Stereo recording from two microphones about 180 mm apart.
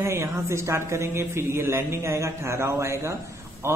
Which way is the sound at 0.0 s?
15° right (ahead or behind).